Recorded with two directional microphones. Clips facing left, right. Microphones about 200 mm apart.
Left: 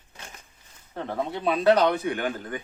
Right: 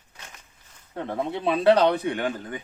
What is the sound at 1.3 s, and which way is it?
Speech, 25° right (ahead or behind).